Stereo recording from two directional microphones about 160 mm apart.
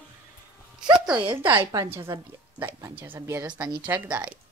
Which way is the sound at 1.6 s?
35° right (ahead or behind).